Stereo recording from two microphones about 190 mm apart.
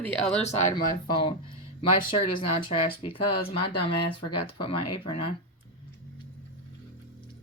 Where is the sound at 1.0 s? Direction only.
25° left (ahead or behind).